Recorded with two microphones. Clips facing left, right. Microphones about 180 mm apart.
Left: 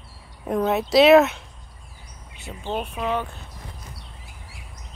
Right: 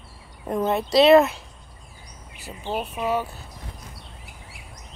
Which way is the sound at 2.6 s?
5° right (ahead or behind).